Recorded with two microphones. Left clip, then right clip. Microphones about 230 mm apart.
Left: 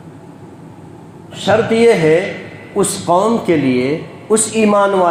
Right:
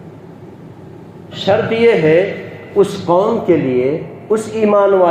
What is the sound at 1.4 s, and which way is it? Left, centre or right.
A man's voice, left.